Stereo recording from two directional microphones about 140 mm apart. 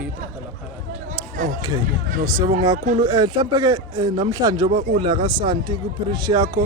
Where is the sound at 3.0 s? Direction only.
30° right (ahead or behind).